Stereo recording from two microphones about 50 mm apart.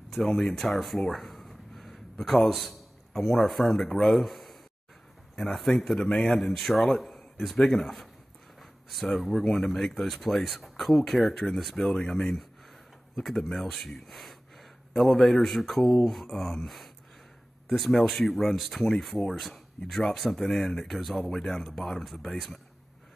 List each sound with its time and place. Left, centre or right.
0.3 s a man's voice: centre
5.6 s speech: centre
6.0 s a man's voice: left
6.3 s speech: centre
7.0 s a sound: centre
7.8 s speech: centre
9.1 s speech: centre
9.7 s a man's voice: centre
9.9 s speech: centre
19.0 s speech: centre